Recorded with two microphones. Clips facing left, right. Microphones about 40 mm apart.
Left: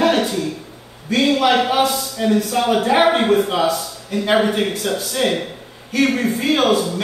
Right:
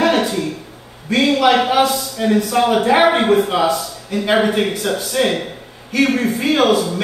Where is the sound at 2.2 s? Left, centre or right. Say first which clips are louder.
Right 2 dB; centre.